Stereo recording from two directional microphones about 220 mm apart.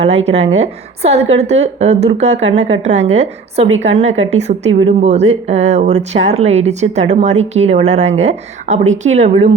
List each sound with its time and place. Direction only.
0.0 s a woman's voice: 30° right (ahead or behind)